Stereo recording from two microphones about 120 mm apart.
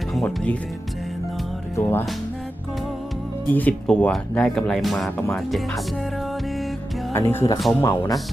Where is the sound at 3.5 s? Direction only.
15° left (ahead or behind).